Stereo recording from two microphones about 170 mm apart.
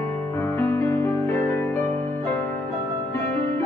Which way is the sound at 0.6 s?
15° left (ahead or behind).